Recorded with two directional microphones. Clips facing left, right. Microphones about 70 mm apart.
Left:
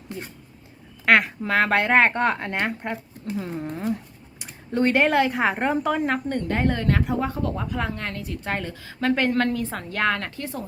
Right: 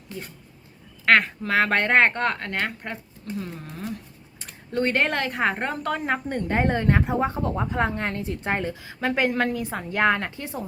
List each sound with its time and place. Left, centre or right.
1.0 s speech: centre; by 3.7 s left
3.8 s a sound: left
4.4 s speech: centre
6.2 s speech: centre